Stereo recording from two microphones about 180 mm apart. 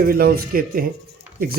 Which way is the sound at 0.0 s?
55° right (ahead or behind).